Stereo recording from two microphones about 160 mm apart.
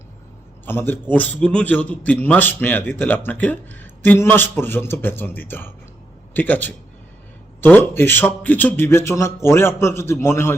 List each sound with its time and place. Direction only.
0.6 s a man's voice: 15° left (ahead or behind)